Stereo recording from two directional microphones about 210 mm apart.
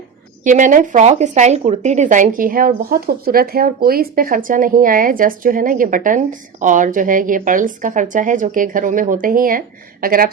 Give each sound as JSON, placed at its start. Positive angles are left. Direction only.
{"t": 0.4, "sound": "speech", "side_deg": -40}